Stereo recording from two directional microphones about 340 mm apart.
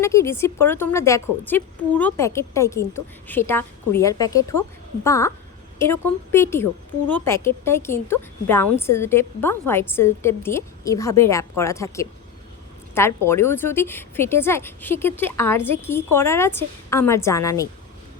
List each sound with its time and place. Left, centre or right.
0.0 s a woman's voice: centre